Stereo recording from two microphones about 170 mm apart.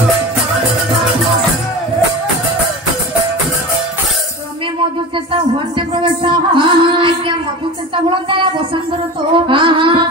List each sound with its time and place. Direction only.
5.3 s music: 30° right (ahead or behind)